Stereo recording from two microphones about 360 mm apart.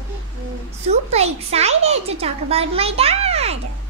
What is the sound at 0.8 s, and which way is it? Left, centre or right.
A child's voice, centre.